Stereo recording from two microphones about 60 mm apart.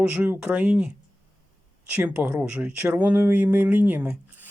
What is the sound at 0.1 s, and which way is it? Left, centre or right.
Speech, right.